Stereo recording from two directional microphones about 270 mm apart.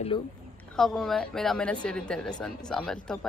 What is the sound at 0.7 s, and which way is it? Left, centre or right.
Speech, centre.